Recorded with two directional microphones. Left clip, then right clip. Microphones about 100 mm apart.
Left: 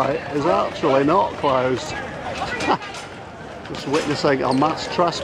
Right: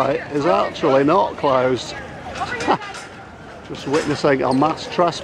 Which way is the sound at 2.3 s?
30° right (ahead or behind).